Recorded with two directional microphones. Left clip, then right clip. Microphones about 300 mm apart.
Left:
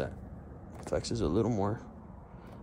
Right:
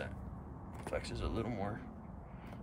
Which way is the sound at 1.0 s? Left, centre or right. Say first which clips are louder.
Left 10 dB; centre.